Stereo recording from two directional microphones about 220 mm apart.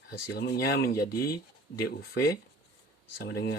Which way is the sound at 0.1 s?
45° left (ahead or behind).